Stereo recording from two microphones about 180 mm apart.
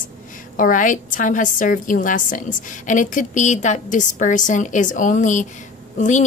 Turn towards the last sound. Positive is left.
turn(degrees=40)  # may be behind; listen again after turning